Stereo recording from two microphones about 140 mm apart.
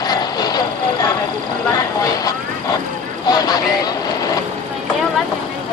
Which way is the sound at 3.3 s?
30° left (ahead or behind).